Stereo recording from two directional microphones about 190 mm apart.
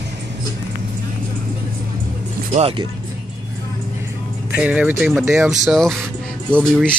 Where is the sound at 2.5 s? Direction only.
30° right (ahead or behind).